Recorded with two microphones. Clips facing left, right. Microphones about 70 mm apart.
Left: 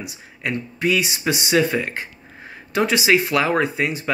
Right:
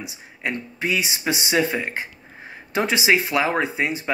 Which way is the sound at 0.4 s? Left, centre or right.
Right.